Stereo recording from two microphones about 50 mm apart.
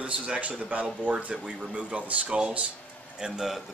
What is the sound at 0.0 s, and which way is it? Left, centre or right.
Speech, right.